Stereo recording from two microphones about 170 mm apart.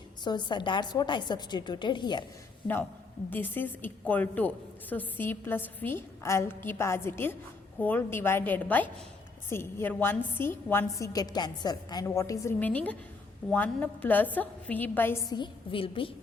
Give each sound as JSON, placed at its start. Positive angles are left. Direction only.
{"t": 0.3, "sound": "a woman's voice", "side_deg": 25}
{"t": 3.2, "sound": "a woman's voice", "side_deg": 10}
{"t": 15.3, "sound": "a woman's voice", "side_deg": 30}